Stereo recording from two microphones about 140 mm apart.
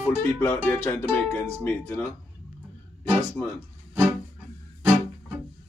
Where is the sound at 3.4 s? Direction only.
10° left (ahead or behind).